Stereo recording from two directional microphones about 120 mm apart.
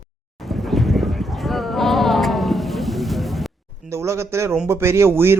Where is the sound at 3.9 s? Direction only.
25° right (ahead or behind).